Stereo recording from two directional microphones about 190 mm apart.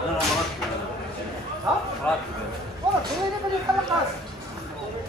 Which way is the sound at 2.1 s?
5° left (ahead or behind).